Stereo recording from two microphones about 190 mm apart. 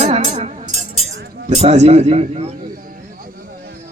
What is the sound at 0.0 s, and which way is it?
Music, 35° right (ahead or behind).